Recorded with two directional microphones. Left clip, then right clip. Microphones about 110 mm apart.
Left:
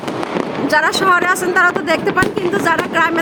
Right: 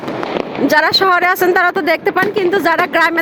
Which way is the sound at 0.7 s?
45° right (ahead or behind).